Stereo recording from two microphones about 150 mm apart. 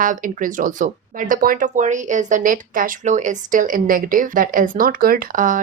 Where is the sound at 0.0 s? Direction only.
60° right (ahead or behind).